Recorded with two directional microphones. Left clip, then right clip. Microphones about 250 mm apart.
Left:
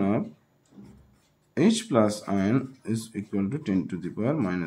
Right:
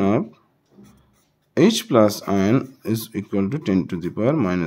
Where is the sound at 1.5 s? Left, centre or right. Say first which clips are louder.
Right 7 dB; right.